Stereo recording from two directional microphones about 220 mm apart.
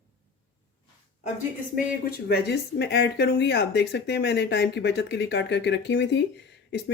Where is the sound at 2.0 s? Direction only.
50° left (ahead or behind).